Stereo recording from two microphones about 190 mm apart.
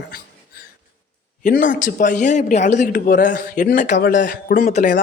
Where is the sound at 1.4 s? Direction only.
45° left (ahead or behind).